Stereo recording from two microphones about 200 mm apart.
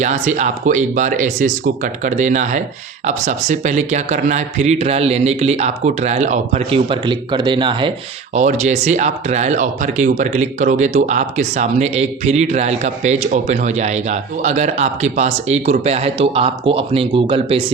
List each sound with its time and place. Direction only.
0.0 s speech: 35° right (ahead or behind)
8.3 s speech: 35° right (ahead or behind)